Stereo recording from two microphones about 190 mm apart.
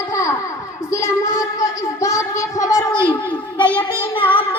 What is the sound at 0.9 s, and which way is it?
Child singing, 15° left (ahead or behind).